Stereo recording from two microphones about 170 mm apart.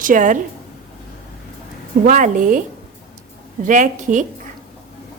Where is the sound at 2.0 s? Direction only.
50° right (ahead or behind).